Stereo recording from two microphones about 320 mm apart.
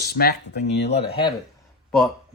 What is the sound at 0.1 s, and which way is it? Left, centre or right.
Speech, left.